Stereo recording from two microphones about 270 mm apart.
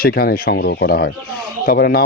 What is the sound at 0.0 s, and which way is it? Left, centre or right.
Speech, left.